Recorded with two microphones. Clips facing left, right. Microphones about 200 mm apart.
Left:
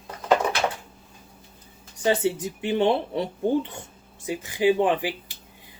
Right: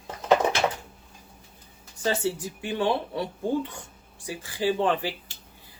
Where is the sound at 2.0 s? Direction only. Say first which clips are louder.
Left 4 dB; 15° left (ahead or behind).